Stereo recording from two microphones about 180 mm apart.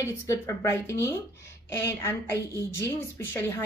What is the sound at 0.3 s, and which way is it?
A woman's voice, 15° left (ahead or behind).